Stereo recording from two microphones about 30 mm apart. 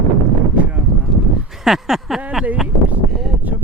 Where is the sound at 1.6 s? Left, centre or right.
Centre.